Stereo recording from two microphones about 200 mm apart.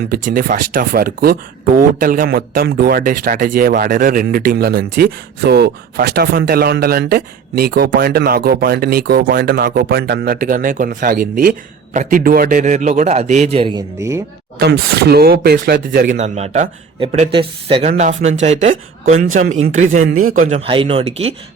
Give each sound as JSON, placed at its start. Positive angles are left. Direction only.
{"t": 0.1, "sound": "speech", "side_deg": -45}
{"t": 14.0, "sound": "speech", "side_deg": -15}
{"t": 14.6, "sound": "speech", "side_deg": -55}
{"t": 20.7, "sound": "speech", "side_deg": -25}